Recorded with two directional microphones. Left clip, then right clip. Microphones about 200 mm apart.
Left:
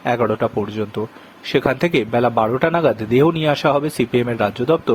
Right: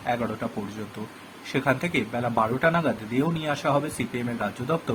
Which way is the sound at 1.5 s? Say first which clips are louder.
Left 8 dB; 45° left (ahead or behind).